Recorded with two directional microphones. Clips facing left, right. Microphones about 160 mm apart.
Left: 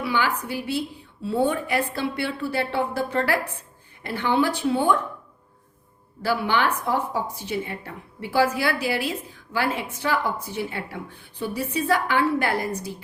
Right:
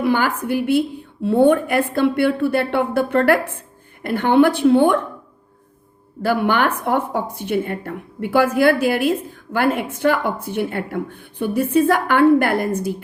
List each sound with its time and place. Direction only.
0.0 s a woman's voice: 50° right (ahead or behind)
6.2 s speech: 55° right (ahead or behind)